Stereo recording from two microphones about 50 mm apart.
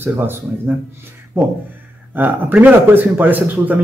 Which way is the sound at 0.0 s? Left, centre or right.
Right.